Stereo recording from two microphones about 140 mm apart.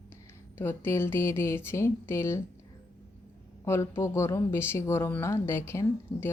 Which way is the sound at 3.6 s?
20° left (ahead or behind).